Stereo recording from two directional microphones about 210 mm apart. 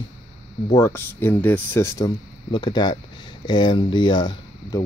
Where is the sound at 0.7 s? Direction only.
15° left (ahead or behind).